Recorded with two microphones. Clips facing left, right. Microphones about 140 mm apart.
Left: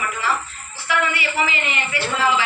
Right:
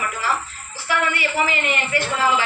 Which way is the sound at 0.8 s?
45° right (ahead or behind).